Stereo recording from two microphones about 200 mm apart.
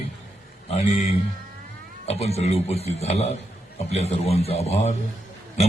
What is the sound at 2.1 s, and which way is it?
A man's voice, 30° left (ahead or behind).